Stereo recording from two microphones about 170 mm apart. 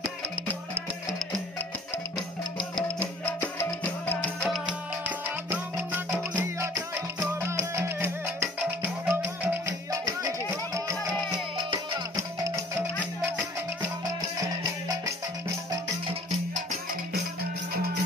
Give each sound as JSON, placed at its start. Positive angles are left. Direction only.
{"t": 2.1, "sound": "music", "side_deg": 30}
{"t": 3.0, "sound": "music", "side_deg": 10}
{"t": 5.5, "sound": "music", "side_deg": -10}
{"t": 16.1, "sound": "music", "side_deg": -35}